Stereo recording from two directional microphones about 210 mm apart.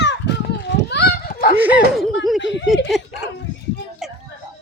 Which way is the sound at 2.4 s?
60° left (ahead or behind).